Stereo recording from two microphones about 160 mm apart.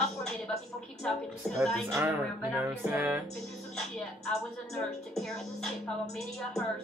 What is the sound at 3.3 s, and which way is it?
Speech, 5° left (ahead or behind).